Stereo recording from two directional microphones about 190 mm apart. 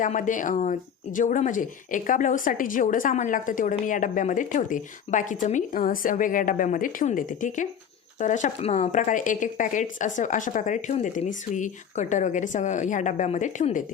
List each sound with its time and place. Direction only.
0.0 s speech: 40° left (ahead or behind)